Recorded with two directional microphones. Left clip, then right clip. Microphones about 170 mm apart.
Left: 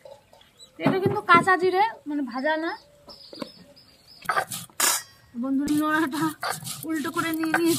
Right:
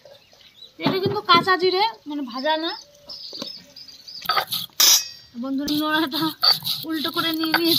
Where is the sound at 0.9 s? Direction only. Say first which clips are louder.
Right 1 dB; 5° left (ahead or behind).